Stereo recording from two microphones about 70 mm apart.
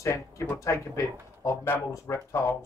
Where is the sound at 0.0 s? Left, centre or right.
Left.